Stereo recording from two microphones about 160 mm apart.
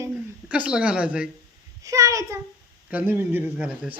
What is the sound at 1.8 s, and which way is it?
A child's voice, 20° right (ahead or behind).